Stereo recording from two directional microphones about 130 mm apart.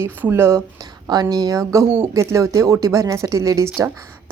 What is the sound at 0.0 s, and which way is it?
Speech, 15° right (ahead or behind).